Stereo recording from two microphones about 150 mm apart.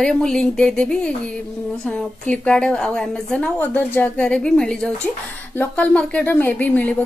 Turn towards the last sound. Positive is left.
turn(degrees=10)  # may be behind; listen again after turning